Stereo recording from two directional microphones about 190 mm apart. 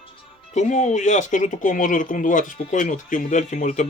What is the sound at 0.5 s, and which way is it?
Speech, 40° left (ahead or behind).